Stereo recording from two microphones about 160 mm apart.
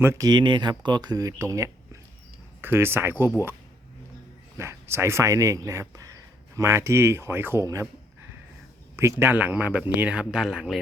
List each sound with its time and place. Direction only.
0.0 s speech: 20° right (ahead or behind)
4.5 s speech: 15° right (ahead or behind)
9.0 s speech: 15° right (ahead or behind)